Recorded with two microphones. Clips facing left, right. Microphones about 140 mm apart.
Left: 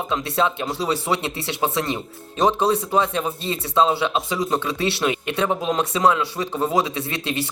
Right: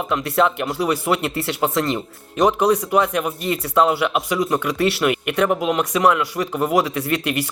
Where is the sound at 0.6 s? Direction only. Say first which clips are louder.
Right 3 dB; 25° left (ahead or behind).